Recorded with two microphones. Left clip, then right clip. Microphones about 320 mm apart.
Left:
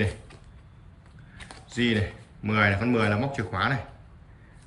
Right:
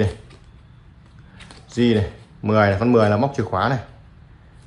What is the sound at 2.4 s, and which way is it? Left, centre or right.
A man's voice, centre.